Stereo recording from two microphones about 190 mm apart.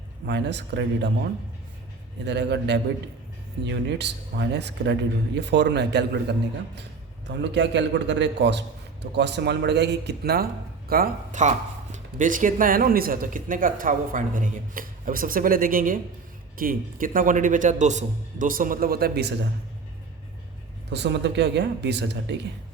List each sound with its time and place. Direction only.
0.3 s speech: 65° right (ahead or behind)
2.2 s a man's voice: 65° right (ahead or behind)
20.9 s speech: 65° right (ahead or behind)